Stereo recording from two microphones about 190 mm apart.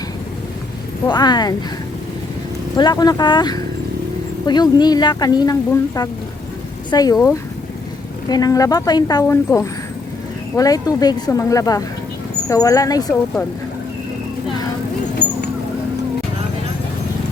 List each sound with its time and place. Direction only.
1.1 s speech: 20° left (ahead or behind)
2.7 s speech: 20° left (ahead or behind)
8.3 s a woman's voice: 20° left (ahead or behind)